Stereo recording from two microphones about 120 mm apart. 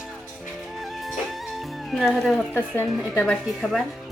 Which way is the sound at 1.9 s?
Centre (ahead or behind).